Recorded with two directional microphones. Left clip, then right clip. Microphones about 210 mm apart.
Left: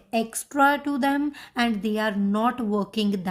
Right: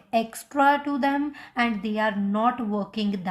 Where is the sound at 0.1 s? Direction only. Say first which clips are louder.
Right 2 dB; 45° left (ahead or behind).